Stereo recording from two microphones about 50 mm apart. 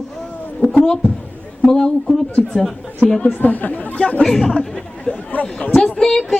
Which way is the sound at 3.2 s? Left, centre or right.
Left.